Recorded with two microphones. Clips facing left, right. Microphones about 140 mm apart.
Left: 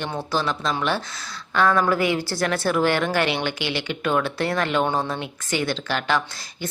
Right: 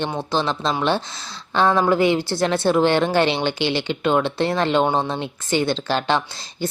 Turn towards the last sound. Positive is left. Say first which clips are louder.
# right 3 dB
turn(degrees=-30)  # may be behind; listen again after turning